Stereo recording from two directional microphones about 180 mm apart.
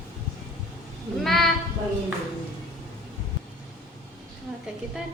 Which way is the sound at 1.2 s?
Centre (ahead or behind).